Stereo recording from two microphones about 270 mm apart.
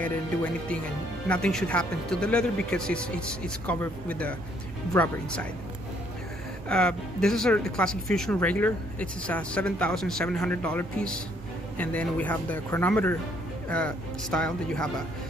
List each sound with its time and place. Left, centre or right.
0.0 s speech: centre
6.7 s speech: centre